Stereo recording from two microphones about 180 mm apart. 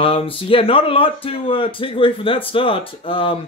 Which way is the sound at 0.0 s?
30° left (ahead or behind).